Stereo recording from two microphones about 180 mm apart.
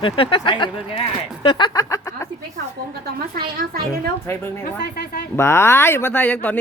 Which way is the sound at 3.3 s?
55° right (ahead or behind).